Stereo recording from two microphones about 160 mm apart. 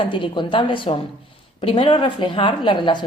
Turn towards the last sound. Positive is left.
turn(degrees=30)  # may be behind; listen again after turning